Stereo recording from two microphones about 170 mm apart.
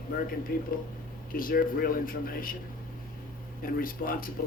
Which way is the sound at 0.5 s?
60° left (ahead or behind).